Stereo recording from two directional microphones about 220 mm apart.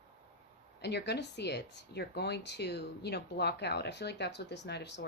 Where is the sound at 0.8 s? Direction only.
50° left (ahead or behind).